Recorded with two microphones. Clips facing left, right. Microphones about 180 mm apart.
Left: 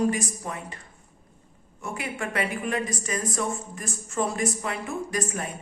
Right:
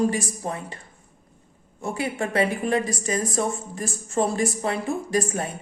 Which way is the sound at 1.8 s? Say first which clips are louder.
Right 5 dB; 30° right (ahead or behind).